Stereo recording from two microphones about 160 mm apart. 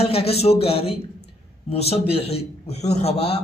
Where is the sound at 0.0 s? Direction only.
40° left (ahead or behind).